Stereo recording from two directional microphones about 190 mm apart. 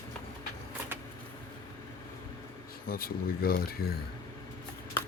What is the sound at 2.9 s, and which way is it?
Speech, 50° left (ahead or behind).